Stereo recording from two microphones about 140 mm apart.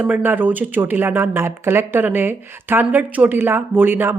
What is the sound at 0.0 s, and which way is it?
A woman's voice, 10° right (ahead or behind).